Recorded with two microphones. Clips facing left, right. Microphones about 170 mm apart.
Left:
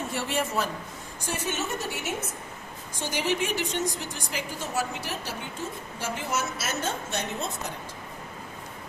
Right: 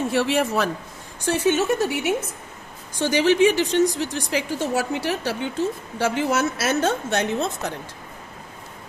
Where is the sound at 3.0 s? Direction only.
80° right.